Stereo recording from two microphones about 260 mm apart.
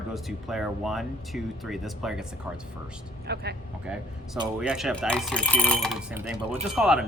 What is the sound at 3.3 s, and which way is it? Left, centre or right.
Speech, right.